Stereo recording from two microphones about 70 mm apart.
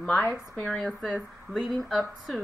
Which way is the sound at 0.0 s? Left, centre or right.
Left.